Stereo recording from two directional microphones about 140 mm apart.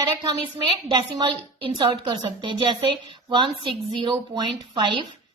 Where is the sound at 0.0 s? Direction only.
30° right (ahead or behind).